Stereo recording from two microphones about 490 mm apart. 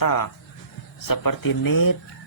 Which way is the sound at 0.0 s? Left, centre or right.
Left.